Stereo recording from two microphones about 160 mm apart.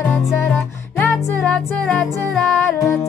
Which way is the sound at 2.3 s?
Centre (ahead or behind).